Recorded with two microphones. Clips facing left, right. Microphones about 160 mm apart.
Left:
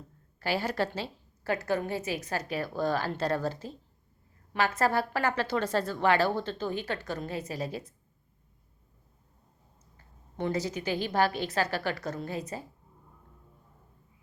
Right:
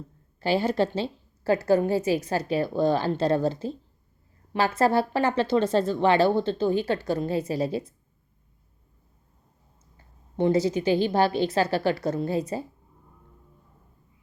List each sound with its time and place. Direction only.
0.3 s a woman's voice: 25° right (ahead or behind)
10.3 s a woman's voice: 30° right (ahead or behind)